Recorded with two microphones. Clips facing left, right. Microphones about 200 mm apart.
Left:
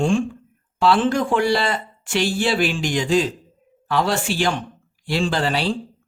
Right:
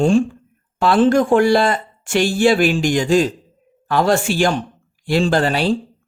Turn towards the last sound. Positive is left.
turn(degrees=-50)  # may be behind; listen again after turning